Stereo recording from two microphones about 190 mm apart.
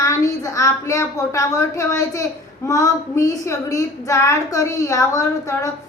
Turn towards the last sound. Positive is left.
turn(degrees=15)  # may be behind; listen again after turning